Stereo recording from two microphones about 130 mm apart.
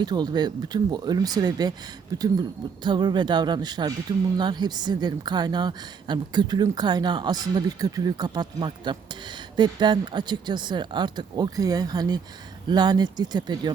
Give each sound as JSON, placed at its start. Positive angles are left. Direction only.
{"t": 0.0, "sound": "speech", "side_deg": -35}
{"t": 2.8, "sound": "speech", "side_deg": -35}